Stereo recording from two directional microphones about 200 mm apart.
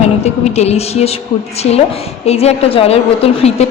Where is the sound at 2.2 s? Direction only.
30° left (ahead or behind).